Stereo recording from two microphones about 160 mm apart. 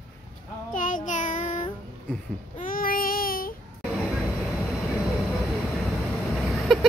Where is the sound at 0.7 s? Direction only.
55° left (ahead or behind).